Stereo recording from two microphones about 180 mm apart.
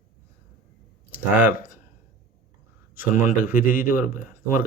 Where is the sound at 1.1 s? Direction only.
50° left (ahead or behind).